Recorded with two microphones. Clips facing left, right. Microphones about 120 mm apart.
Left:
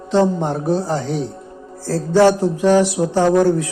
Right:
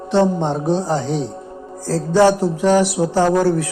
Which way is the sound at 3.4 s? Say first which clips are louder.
Left 2 dB; 20° left (ahead or behind).